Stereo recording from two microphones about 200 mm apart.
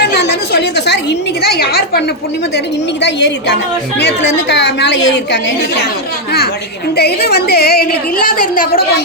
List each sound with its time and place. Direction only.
0.0 s a sound: 55° left (ahead or behind)
1.4 s a woman's voice: 50° left (ahead or behind)
6.9 s a woman's voice: 55° left (ahead or behind)